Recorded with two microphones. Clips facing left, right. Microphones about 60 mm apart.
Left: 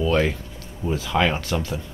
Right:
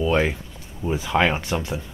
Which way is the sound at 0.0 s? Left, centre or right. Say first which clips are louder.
Even; centre.